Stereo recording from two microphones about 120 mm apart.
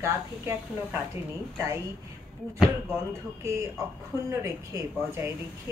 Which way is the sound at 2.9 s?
25° right (ahead or behind).